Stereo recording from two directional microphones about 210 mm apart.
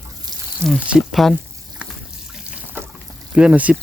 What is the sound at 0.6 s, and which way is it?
Speech, centre (ahead or behind).